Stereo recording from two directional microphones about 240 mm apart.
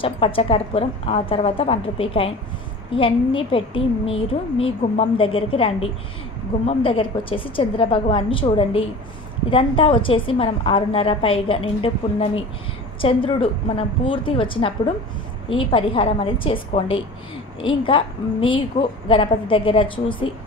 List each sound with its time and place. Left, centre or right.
0.0 s a woman's voice: left